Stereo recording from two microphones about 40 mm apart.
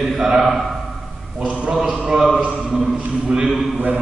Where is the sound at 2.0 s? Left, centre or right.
Centre.